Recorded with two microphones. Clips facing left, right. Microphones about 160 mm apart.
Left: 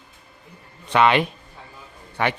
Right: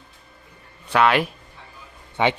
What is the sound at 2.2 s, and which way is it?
Speech, 20° right (ahead or behind).